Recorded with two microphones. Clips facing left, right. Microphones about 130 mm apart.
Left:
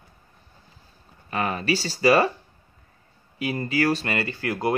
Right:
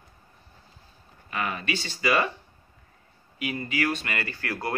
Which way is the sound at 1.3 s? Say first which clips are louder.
Left 5 dB; 35° left (ahead or behind).